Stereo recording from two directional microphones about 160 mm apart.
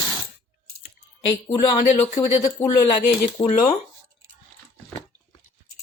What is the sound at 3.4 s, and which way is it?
Speech, 45° left (ahead or behind).